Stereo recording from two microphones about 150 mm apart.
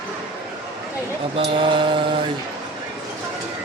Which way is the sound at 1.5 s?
35° right (ahead or behind).